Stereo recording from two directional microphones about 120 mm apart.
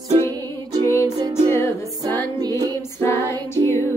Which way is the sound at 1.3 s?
25° left (ahead or behind).